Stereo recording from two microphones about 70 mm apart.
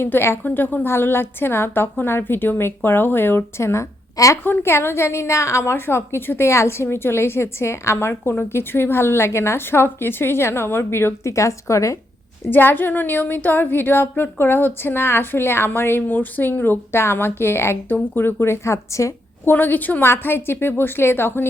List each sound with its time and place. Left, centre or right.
0.0 s a woman's voice: left
4.4 s a woman's voice: left
12.5 s a woman's voice: left
19.5 s a woman's voice: left